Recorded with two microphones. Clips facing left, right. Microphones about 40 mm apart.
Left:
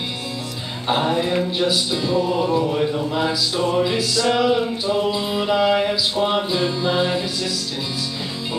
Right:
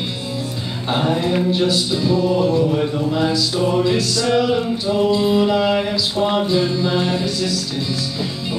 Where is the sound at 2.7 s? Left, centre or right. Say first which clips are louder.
Right 2 dB; centre.